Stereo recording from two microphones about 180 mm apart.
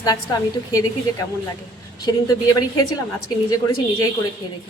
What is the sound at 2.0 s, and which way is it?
Speech, 20° left (ahead or behind).